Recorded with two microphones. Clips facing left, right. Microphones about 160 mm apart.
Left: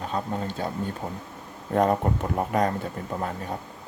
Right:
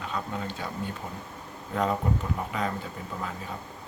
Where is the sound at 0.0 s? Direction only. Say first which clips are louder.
Left 4 dB; 40° left (ahead or behind).